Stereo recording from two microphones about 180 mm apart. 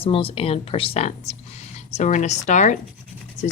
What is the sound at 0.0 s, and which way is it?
Speech, 30° left (ahead or behind).